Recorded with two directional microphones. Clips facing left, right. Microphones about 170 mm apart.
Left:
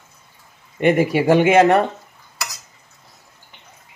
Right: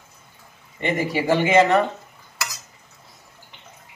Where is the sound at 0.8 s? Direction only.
60° left (ahead or behind).